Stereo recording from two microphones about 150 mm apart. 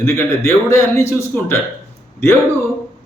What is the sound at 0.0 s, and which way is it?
Speech, 15° left (ahead or behind).